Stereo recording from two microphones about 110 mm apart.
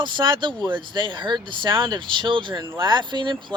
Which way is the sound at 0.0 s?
45° right (ahead or behind).